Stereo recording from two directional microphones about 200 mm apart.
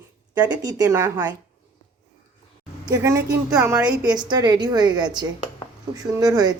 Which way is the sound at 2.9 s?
15° right (ahead or behind).